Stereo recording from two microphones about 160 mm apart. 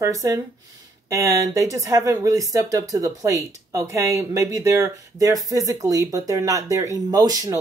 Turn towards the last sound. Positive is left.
turn(degrees=-25)  # may be behind; listen again after turning